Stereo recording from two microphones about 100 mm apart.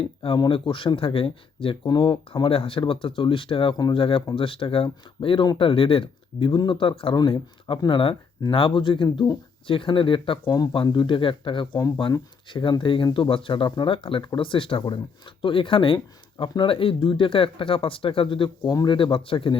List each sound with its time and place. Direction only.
0.0 s speech: 65° left (ahead or behind)
1.8 s speech: 45° left (ahead or behind); by 7.2 s 60° left (ahead or behind)
7.2 s speech: 50° left (ahead or behind)